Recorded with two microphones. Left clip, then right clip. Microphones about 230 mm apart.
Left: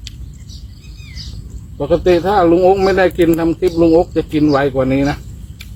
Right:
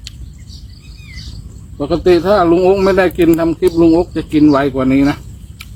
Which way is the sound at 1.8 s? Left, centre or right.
Centre.